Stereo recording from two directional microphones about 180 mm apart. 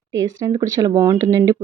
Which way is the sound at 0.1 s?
20° right (ahead or behind).